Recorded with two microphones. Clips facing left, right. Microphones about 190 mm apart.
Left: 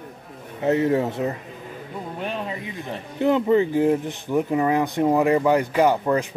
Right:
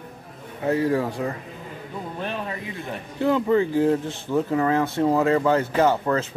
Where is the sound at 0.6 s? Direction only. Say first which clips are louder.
Left 2 dB; 25° left (ahead or behind).